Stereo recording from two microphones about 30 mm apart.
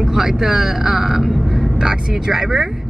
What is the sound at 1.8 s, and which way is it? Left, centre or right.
Speech, right.